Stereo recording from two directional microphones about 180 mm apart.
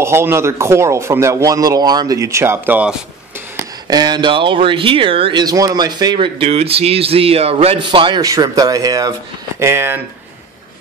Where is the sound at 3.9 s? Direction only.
25° right (ahead or behind).